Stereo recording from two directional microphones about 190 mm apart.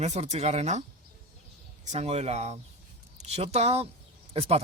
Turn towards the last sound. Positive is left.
turn(degrees=-30)  # may be behind; listen again after turning